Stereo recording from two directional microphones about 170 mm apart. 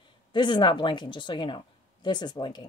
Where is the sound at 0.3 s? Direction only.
25° left (ahead or behind).